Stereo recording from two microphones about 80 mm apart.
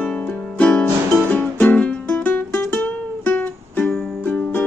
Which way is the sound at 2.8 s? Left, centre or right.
Centre.